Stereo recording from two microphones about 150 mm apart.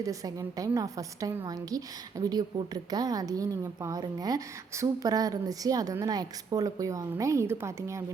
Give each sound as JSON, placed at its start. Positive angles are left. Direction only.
{"t": 0.0, "sound": "a woman's voice", "side_deg": -25}